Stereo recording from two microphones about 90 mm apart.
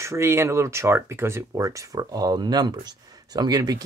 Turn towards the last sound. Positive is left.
turn(degrees=-45)  # may be behind; listen again after turning